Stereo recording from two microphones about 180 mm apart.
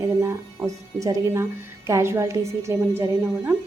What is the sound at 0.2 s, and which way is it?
A woman's voice, 15° right (ahead or behind).